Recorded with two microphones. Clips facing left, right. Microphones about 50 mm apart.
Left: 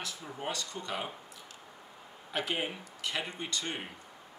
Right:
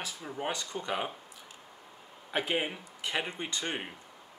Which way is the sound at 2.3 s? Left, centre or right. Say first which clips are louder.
Right 3 dB; centre.